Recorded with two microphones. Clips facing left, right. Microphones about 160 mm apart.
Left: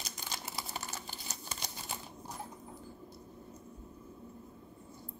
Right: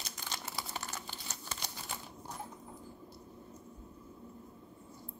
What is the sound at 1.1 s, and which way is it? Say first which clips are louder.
Crumpling: even; 15° left (ahead or behind).